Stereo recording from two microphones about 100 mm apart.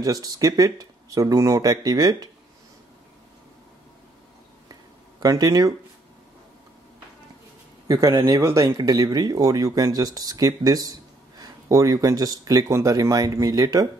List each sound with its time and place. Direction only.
0.0 s speech: 35° right (ahead or behind)
5.2 s speech: 40° right (ahead or behind)
7.9 s speech: 35° right (ahead or behind)